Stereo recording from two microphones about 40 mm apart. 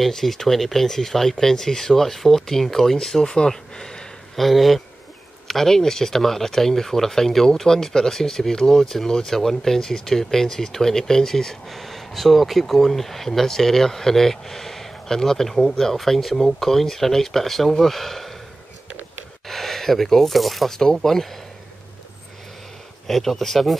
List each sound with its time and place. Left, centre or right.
0.0 s speech: centre
4.4 s speech: centre
19.4 s speech: centre
20.7 s speech: centre
23.0 s speech: centre